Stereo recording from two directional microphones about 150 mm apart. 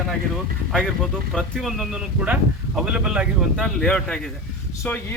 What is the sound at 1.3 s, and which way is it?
Speech, centre (ahead or behind).